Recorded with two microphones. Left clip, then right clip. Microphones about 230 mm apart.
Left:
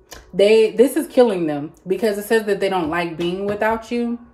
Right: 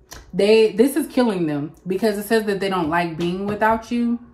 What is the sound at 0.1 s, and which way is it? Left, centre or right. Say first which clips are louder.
Speech: left 2 dB; centre.